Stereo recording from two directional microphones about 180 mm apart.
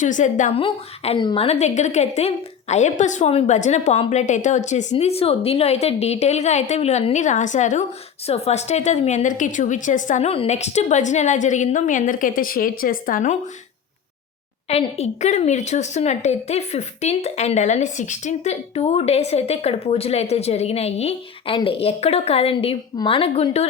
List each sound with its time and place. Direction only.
0.0 s a woman's voice: 45° left (ahead or behind)
0.6 s a woman's voice: 30° left (ahead or behind); by 13.3 s 50° left (ahead or behind)
14.7 s a woman's voice: 35° left (ahead or behind)